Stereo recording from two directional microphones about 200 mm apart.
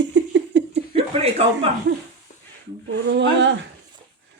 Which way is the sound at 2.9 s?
65° right (ahead or behind).